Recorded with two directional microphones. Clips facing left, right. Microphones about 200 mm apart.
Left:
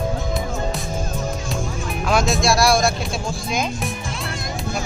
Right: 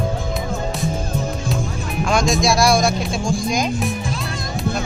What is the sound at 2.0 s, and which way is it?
Speech, 5° left (ahead or behind).